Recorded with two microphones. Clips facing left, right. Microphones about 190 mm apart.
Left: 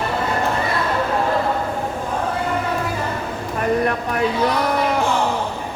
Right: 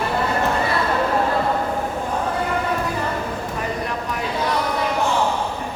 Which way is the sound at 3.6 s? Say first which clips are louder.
Left 10 dB; 60° left (ahead or behind).